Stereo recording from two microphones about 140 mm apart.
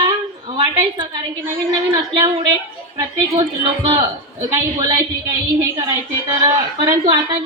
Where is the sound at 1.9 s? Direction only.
30° right (ahead or behind).